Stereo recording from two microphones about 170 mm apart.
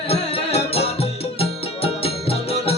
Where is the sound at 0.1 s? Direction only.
35° left (ahead or behind).